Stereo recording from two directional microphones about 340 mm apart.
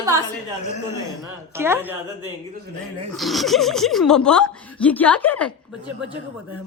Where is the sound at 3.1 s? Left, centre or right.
Centre.